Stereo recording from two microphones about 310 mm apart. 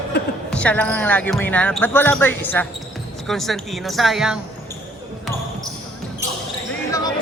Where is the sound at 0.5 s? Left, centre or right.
Centre.